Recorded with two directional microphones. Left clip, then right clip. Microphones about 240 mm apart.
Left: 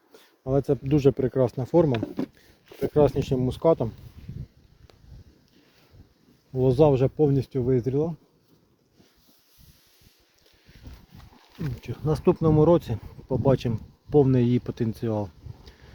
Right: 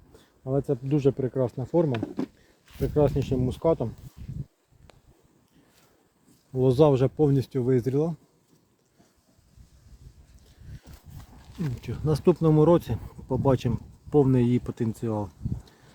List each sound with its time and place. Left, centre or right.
0.4 s speech: left
6.5 s speech: centre
11.8 s speech: centre